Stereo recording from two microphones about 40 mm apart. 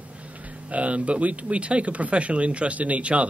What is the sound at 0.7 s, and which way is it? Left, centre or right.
Speech, right.